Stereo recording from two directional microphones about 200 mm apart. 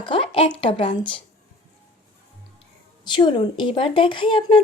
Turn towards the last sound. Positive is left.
turn(degrees=25)  # may be behind; listen again after turning